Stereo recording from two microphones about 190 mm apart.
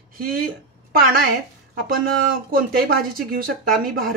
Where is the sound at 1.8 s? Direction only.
50° right (ahead or behind).